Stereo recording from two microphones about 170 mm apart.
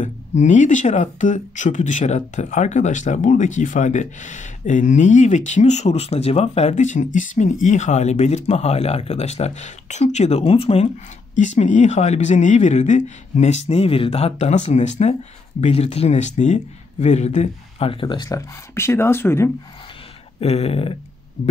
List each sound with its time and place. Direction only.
0.4 s speech: 45° left (ahead or behind); by 19.5 s 15° left (ahead or behind)
20.3 s speech: 35° left (ahead or behind)